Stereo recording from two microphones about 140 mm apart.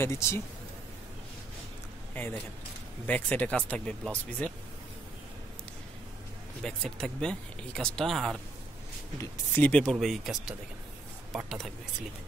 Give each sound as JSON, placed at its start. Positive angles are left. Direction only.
{"t": 0.0, "sound": "a man's voice", "side_deg": 20}
{"t": 3.1, "sound": "speech", "side_deg": 10}
{"t": 6.6, "sound": "speech", "side_deg": 5}
{"t": 9.2, "sound": "speech", "side_deg": 15}